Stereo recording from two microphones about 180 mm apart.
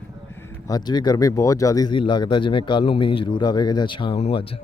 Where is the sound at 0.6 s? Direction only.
20° left (ahead or behind).